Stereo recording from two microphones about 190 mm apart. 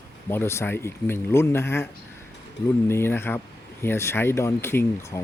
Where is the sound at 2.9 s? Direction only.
10° left (ahead or behind).